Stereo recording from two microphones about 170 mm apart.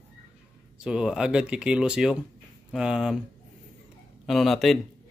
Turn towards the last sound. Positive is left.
turn(degrees=0)  # may be behind; listen again after turning